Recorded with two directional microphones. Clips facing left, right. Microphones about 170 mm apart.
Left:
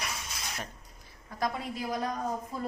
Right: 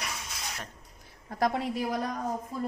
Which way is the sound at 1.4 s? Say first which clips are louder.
Right 5 dB; 70° right (ahead or behind).